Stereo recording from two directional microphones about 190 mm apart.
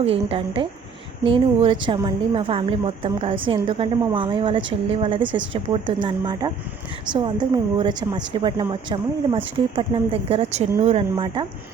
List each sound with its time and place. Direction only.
0.0 s a woman's voice: 30° right (ahead or behind)